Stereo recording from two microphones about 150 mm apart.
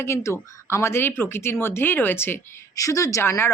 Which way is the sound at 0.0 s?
20° left (ahead or behind).